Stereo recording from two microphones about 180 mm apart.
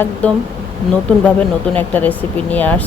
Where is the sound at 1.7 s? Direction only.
10° left (ahead or behind).